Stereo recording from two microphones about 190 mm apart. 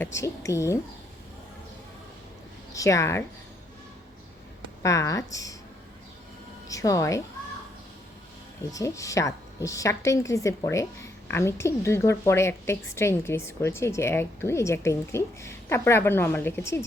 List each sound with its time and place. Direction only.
0.0 s a woman's voice: 15° left (ahead or behind)
2.7 s a woman's voice: 15° left (ahead or behind)
4.8 s a woman's voice: 15° left (ahead or behind)
6.7 s a woman's voice: 15° left (ahead or behind)
8.7 s a woman's voice: 15° left (ahead or behind)